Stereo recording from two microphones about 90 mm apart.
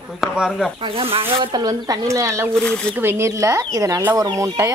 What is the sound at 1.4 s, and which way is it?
Speech, 50° right (ahead or behind).